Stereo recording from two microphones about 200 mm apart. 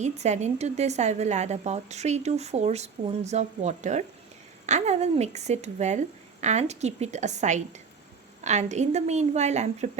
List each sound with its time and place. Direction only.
0.0 s a woman's voice: 35° right (ahead or behind)